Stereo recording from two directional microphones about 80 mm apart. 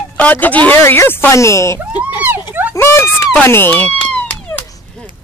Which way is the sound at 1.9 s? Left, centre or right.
Right.